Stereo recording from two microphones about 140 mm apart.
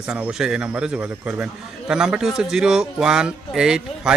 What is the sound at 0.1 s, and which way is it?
A man's voice, 5° right (ahead or behind).